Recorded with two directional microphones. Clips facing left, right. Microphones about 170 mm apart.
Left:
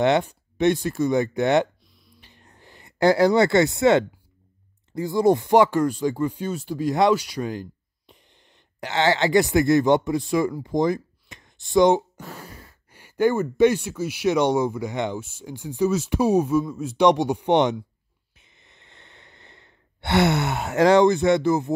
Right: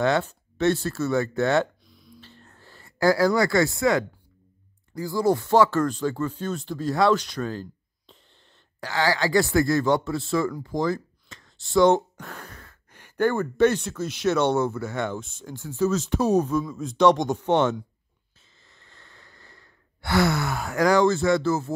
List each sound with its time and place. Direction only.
0.0 s speech: 15° left (ahead or behind)
1.9 s a sound: centre (ahead or behind)
2.1 s a sound: 15° left (ahead or behind)
4.9 s speech: 20° left (ahead or behind)
8.7 s speech: 20° left (ahead or behind)
18.4 s sigh: 20° left (ahead or behind)